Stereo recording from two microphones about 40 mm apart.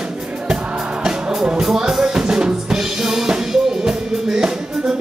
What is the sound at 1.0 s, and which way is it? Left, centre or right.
Music, centre.